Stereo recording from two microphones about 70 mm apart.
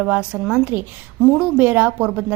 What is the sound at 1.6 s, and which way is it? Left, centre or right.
Speech, right.